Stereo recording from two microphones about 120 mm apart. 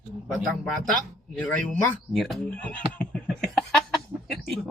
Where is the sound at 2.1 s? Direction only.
Centre (ahead or behind).